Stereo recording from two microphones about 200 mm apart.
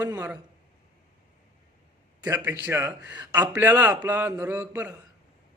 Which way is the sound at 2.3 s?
10° right (ahead or behind).